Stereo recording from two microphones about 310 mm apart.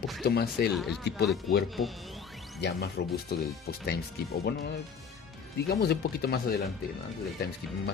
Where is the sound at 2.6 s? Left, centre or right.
Left.